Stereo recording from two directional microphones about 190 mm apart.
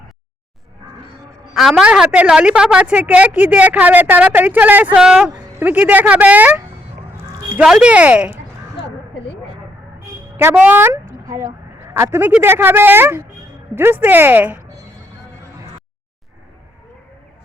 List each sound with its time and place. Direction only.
1.5 s a woman's voice: centre (ahead or behind)
10.3 s a woman's voice: 10° right (ahead or behind)